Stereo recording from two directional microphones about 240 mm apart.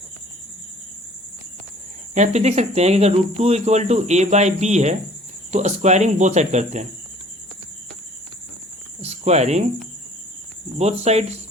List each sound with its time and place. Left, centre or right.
2.1 s speech: right
9.0 s cricket: right
10.8 s speech: right